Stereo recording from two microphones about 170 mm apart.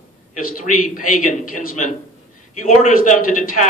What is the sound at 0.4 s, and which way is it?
A man's voice, 55° left (ahead or behind).